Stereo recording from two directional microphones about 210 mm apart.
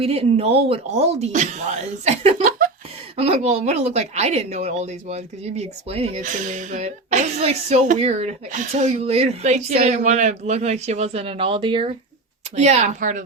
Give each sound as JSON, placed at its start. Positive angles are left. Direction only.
{"t": 0.0, "sound": "speech", "side_deg": -30}
{"t": 2.4, "sound": "a sound", "side_deg": -40}
{"t": 3.2, "sound": "speech", "side_deg": -30}